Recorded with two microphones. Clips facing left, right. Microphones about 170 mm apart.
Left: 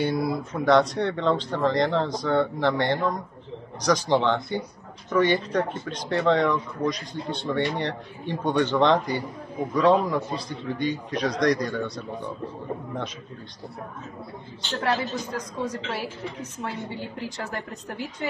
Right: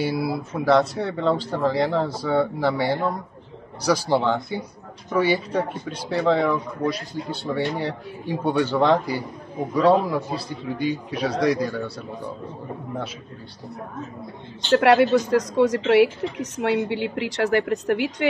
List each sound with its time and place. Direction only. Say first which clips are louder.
0.0 s speech: right 1 dB; 5° right (ahead or behind)
14.8 s speech: right 9 dB; 80° right